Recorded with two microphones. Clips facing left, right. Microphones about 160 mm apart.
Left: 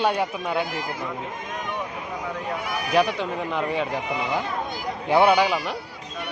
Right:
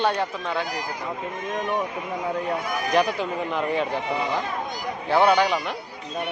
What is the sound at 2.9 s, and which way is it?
Speech, centre (ahead or behind).